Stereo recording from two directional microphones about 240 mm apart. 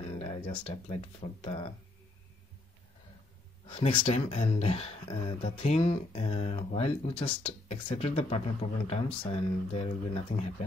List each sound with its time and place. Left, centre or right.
0.5 s speech: left
3.6 s speech: left